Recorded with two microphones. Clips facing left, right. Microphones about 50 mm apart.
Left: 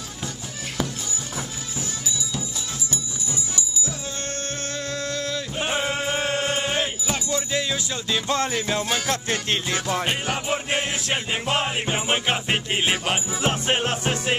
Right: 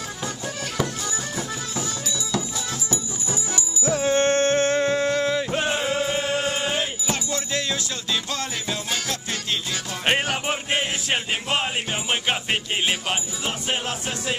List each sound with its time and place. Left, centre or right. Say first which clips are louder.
2.9 s music: right 3 dB; right
6.2 s music: even; left
6.7 s music: even; centre
9.1 s music: left 3 dB; left
10.0 s music: right 3 dB; right
11.4 s music: left 4 dB; centre
11.9 s music: left 3 dB; centre
13.4 s music: left 4 dB; left